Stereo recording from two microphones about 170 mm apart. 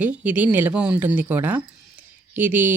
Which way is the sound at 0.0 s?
10° right (ahead or behind).